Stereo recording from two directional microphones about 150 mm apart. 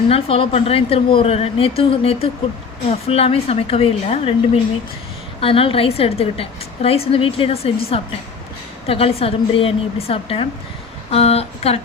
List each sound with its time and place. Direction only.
0.1 s a woman's voice: 40° left (ahead or behind)